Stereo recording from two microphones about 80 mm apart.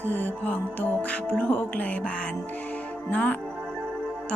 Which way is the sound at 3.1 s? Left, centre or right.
Centre.